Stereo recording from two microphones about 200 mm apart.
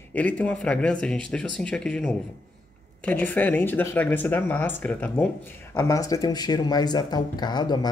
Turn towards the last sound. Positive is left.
turn(degrees=20)  # may be behind; listen again after turning